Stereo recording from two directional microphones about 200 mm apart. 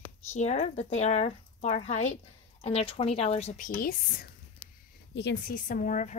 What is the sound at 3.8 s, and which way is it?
Speech, 45° left (ahead or behind).